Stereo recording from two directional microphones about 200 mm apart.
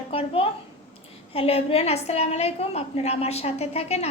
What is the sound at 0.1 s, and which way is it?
A woman's voice, 30° left (ahead or behind).